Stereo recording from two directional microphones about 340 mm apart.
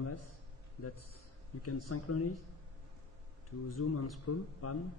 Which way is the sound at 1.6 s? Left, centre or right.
Left.